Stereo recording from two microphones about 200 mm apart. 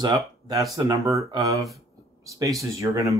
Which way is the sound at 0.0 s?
20° right (ahead or behind).